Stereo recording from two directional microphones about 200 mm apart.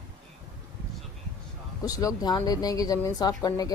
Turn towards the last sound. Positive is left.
turn(degrees=20)  # may be behind; listen again after turning